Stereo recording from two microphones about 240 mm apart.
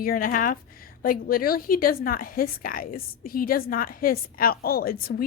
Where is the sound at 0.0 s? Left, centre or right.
Left.